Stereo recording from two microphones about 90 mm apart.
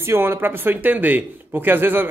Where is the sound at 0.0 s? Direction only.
30° right (ahead or behind).